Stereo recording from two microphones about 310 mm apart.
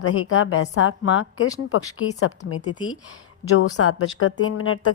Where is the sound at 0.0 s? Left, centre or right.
Left.